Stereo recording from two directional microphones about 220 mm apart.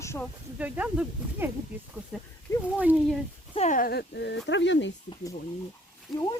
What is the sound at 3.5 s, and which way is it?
Speech, 30° left (ahead or behind).